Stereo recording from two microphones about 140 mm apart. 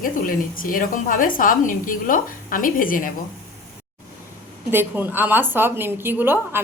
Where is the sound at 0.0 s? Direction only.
85° left.